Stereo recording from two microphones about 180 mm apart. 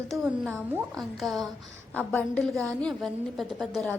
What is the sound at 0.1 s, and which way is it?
Speech, 5° right (ahead or behind).